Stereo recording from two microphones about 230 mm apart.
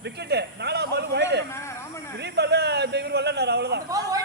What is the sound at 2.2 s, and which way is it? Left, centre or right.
Speech, right.